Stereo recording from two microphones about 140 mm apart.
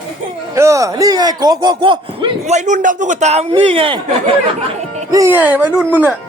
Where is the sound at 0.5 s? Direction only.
20° right (ahead or behind); by 2.4 s 35° right (ahead or behind).